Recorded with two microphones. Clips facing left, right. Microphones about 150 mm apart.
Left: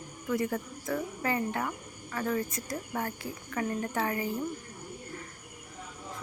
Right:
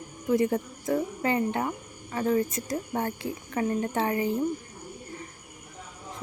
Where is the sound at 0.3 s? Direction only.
25° right (ahead or behind).